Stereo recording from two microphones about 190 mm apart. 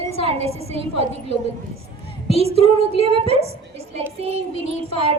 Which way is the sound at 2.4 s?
30° right (ahead or behind).